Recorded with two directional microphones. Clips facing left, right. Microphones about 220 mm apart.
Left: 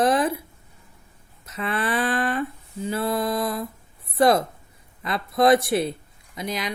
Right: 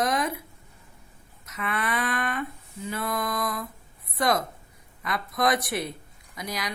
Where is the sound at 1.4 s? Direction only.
30° left (ahead or behind).